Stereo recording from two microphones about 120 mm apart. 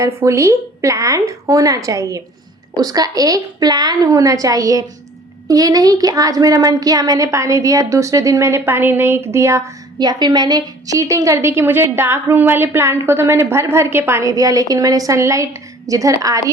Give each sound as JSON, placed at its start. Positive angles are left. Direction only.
{"t": 0.0, "sound": "a woman's voice", "side_deg": -25}